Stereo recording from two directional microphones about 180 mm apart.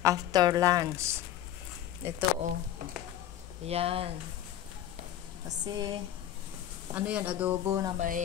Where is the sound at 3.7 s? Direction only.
35° right (ahead or behind).